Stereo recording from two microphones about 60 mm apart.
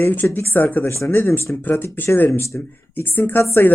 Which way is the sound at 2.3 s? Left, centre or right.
Left.